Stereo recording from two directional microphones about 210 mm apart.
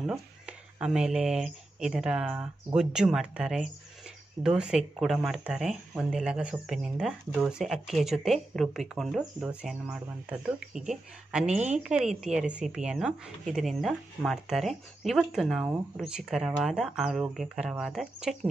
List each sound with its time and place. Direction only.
0.0 s a woman's voice: 5° right (ahead or behind)
11.4 s a woman's voice: 35° right (ahead or behind)
11.8 s a woman's voice: centre (ahead or behind)